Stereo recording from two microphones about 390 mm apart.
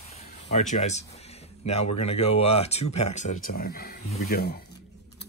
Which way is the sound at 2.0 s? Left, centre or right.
Centre.